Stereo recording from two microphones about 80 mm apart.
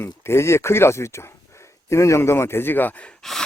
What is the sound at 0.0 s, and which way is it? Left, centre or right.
Speech, left.